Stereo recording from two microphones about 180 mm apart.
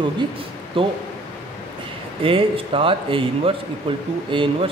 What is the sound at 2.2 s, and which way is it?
Speech, 30° right (ahead or behind).